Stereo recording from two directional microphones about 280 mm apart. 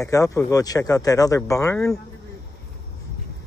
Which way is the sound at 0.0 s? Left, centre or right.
Centre.